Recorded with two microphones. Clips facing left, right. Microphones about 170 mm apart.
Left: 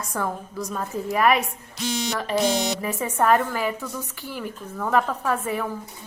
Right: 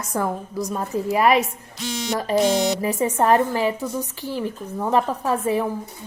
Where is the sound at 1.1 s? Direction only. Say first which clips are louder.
Right 2 dB; 30° right (ahead or behind).